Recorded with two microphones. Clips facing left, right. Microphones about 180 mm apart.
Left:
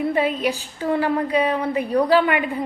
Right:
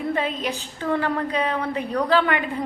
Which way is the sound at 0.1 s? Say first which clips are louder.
Left 4 dB; 10° left (ahead or behind).